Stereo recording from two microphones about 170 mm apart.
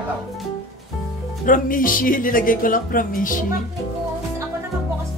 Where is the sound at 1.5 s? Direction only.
55° left (ahead or behind).